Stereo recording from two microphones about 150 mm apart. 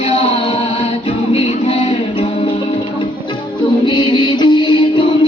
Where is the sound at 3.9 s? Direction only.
30° left (ahead or behind).